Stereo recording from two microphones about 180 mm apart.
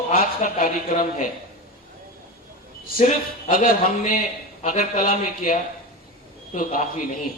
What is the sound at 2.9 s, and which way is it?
Speech, 45° left (ahead or behind).